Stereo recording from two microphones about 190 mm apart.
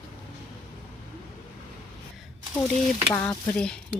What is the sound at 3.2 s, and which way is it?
Speech, 15° left (ahead or behind).